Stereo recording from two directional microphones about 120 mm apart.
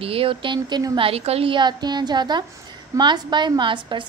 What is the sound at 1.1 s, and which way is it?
A woman's voice, 55° right (ahead or behind).